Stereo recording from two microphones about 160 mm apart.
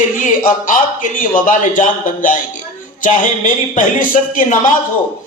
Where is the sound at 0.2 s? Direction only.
55° left (ahead or behind).